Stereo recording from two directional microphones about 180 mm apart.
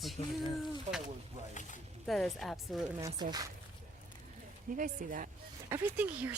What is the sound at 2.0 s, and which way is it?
Speech, centre (ahead or behind).